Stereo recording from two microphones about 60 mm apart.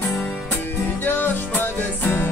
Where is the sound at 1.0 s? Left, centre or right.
Left.